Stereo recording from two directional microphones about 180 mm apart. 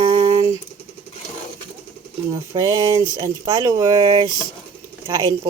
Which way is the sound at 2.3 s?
20° right (ahead or behind).